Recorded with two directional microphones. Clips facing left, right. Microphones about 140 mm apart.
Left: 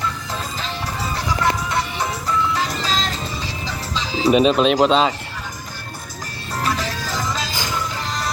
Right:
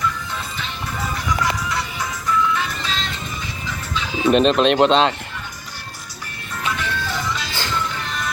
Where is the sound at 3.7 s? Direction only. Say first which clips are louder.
Right 1 dB; 35° left (ahead or behind).